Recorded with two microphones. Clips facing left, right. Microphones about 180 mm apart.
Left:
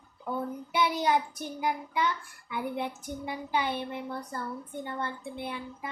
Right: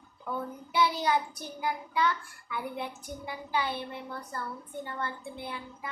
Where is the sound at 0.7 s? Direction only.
20° left (ahead or behind).